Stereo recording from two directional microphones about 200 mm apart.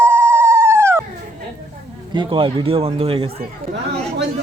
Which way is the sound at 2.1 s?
25° right (ahead or behind).